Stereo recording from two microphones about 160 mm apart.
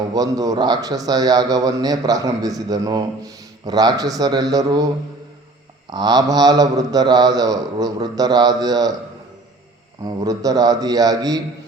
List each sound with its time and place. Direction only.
0.1 s a man's voice: 25° right (ahead or behind)
5.9 s a man's voice: 25° right (ahead or behind)
10.0 s a man's voice: 25° right (ahead or behind)